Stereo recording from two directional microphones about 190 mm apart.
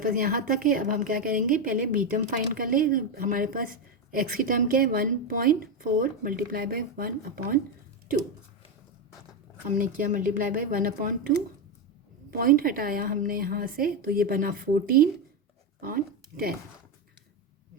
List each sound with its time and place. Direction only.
0.0 s a woman's voice: 50° right (ahead or behind)
9.6 s a woman's voice: 45° right (ahead or behind)